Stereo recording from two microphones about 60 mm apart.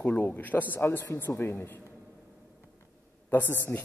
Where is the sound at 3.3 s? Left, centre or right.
Left.